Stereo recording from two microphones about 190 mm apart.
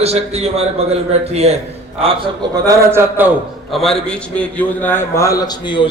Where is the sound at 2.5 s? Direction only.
15° right (ahead or behind).